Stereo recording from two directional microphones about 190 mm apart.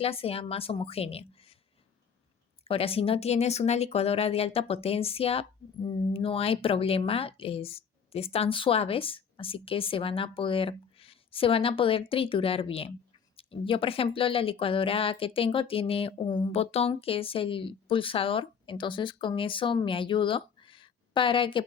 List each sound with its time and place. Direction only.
0.0 s speech: 30° left (ahead or behind)
2.6 s speech: 30° left (ahead or behind)